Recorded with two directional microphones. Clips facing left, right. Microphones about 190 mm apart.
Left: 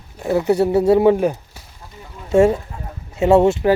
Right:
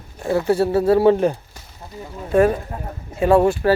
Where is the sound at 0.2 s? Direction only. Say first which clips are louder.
Left 2 dB; 20° left (ahead or behind).